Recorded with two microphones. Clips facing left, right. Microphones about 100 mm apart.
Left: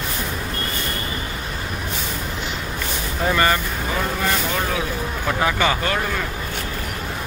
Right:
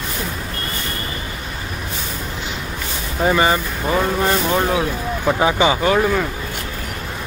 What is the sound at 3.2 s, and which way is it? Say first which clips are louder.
Speech: right 3 dB; 15° right (ahead or behind).